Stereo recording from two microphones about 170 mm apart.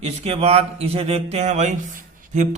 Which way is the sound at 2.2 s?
45° right (ahead or behind).